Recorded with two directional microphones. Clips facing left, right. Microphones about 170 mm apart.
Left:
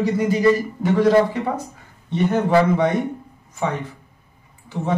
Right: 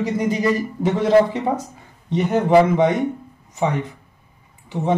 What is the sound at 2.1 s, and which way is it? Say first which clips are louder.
Speech: right 1 dB; 20° right (ahead or behind).